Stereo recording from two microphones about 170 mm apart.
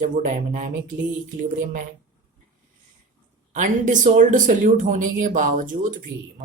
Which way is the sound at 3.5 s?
50° right (ahead or behind).